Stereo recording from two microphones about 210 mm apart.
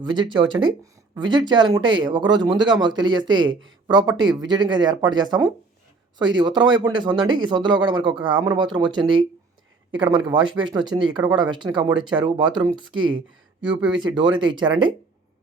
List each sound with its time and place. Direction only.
0.0 s speech: 20° right (ahead or behind)
14.2 s speech: 25° right (ahead or behind)